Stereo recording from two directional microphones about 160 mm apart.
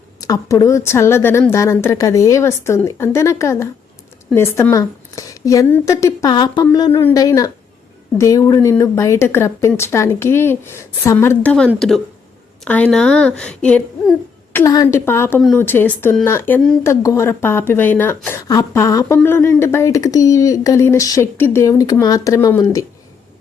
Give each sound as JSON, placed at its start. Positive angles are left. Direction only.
{"t": 0.2, "sound": "a woman's voice", "side_deg": 20}
{"t": 14.6, "sound": "a woman's voice", "side_deg": 20}